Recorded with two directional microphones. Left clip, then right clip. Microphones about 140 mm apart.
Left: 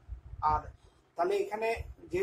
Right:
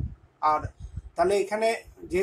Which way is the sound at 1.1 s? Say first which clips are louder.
Right 7 dB; 55° right (ahead or behind).